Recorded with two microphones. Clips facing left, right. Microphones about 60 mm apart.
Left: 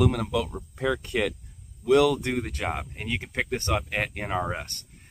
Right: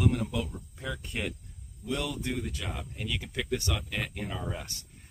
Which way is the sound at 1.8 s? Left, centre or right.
Left.